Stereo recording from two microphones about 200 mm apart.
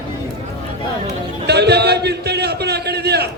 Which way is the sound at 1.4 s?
55° right (ahead or behind).